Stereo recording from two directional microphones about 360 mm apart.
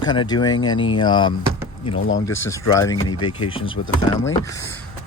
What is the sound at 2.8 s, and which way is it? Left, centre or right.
Speech, centre.